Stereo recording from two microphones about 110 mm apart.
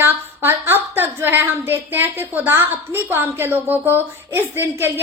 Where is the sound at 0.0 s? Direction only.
20° right (ahead or behind).